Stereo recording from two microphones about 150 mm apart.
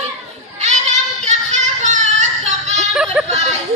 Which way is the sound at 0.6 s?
50° right (ahead or behind).